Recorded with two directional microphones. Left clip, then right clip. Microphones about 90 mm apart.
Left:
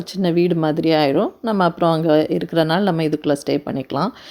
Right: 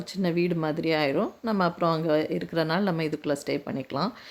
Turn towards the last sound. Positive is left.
turn(degrees=45)  # may be behind; listen again after turning